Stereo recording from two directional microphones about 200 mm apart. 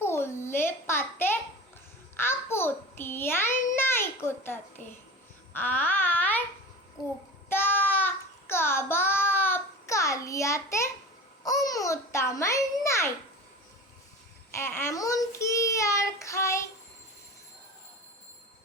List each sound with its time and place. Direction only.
0.0 s a sound: 10° left (ahead or behind)
5.5 s babbling: 10° left (ahead or behind)
7.5 s child singing: 10° left (ahead or behind)
11.4 s a child's voice: 20° left (ahead or behind)
14.5 s a child's voice: 10° left (ahead or behind)